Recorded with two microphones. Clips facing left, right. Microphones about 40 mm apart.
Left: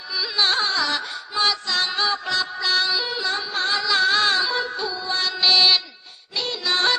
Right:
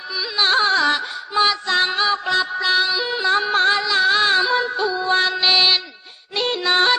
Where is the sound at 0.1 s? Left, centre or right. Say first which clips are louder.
Right 3 dB; centre.